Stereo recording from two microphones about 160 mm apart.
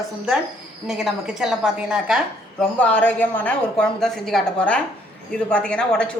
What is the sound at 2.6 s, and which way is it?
A woman's voice, 10° left (ahead or behind).